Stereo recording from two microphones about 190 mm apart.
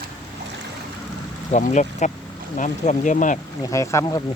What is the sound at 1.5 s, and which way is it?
Speech, 40° left (ahead or behind).